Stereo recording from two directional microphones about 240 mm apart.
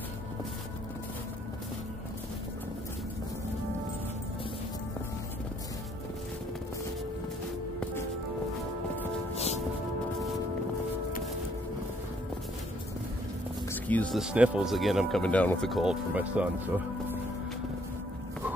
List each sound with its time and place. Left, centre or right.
9.3 s music: left
13.8 s speech: centre